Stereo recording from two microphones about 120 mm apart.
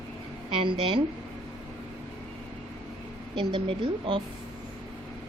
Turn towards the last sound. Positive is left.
turn(degrees=-45)  # may be behind; listen again after turning